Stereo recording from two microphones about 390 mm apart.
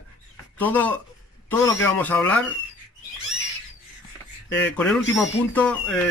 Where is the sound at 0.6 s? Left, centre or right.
Centre.